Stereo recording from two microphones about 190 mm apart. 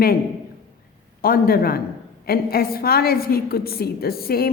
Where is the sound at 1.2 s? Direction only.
50° left (ahead or behind).